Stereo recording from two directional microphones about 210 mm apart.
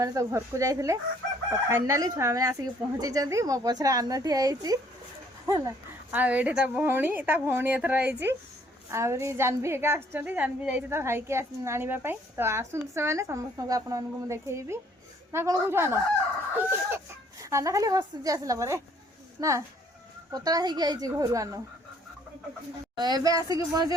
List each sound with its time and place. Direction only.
0.0 s a woman's voice: 15° right (ahead or behind)
17.4 s a woman's voice: 15° right (ahead or behind)
23.0 s a woman's voice: 20° right (ahead or behind)